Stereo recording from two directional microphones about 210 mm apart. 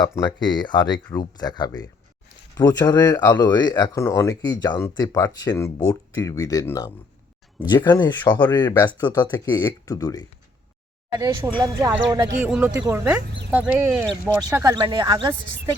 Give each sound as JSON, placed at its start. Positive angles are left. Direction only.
{"t": 0.0, "sound": "speech", "side_deg": 20}
{"t": 8.2, "sound": "speech", "side_deg": 10}
{"t": 8.5, "sound": "speech", "side_deg": 20}
{"t": 11.1, "sound": "a woman's voice", "side_deg": -20}
{"t": 12.4, "sound": "a woman's voice", "side_deg": -5}
{"t": 14.5, "sound": "a woman's voice", "side_deg": -15}